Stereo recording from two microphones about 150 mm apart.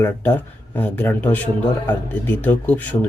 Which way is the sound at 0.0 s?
10° left (ahead or behind).